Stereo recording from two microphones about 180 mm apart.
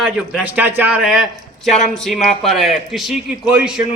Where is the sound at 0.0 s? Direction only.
5° right (ahead or behind).